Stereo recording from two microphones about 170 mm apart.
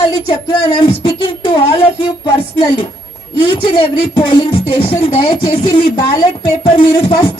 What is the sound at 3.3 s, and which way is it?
Speech, 30° left (ahead or behind).